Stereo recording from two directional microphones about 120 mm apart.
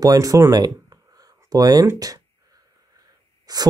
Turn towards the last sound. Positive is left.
turn(degrees=-35)  # may be behind; listen again after turning